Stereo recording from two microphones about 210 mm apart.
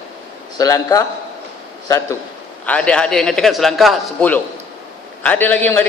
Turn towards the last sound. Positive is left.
turn(degrees=10)  # may be behind; listen again after turning